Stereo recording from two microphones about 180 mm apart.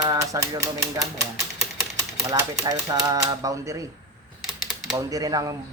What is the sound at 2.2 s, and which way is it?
Speech, 20° right (ahead or behind).